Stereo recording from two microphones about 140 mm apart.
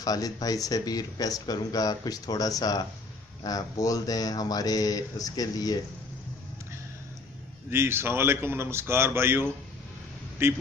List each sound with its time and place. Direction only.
0.0 s speech: 25° left (ahead or behind)
7.7 s speech: 15° right (ahead or behind)